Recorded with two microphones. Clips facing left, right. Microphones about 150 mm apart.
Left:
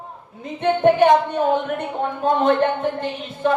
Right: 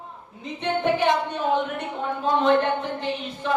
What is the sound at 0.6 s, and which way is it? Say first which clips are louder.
Speech: left 7 dB; 50° left (ahead or behind).